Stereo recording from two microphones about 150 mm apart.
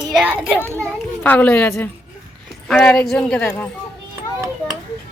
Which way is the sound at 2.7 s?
5° left (ahead or behind).